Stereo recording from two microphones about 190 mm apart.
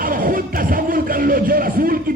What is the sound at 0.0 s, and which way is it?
Music, 50° right (ahead or behind).